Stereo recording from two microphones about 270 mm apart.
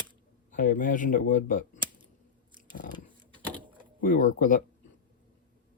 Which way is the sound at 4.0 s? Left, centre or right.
Left.